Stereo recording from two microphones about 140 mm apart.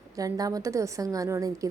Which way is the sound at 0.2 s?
25° right (ahead or behind).